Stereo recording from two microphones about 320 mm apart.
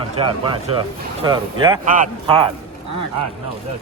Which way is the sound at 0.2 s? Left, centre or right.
Centre.